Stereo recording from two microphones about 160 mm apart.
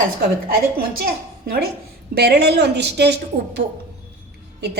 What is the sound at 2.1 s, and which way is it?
A woman's voice, 90° right.